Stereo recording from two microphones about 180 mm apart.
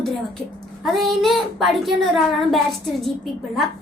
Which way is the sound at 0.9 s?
Centre (ahead or behind).